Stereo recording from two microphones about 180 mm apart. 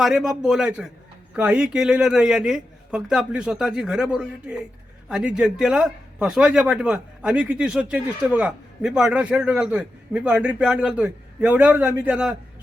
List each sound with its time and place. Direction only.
0.0 s a man's voice: 5° right (ahead or behind)